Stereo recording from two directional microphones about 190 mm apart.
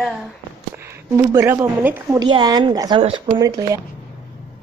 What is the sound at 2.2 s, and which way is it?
Speech, 25° right (ahead or behind).